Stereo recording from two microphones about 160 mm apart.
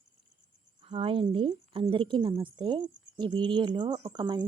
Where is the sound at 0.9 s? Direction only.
35° right (ahead or behind).